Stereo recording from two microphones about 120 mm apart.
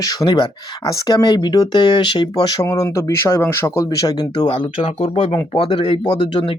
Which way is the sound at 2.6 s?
25° left (ahead or behind).